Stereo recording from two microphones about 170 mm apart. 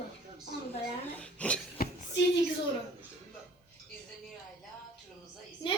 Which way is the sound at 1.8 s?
60° left (ahead or behind).